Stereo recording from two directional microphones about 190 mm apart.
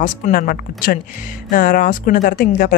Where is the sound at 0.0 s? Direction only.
45° left (ahead or behind).